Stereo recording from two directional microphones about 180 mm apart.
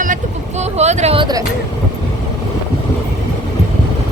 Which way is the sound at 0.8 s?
35° right (ahead or behind).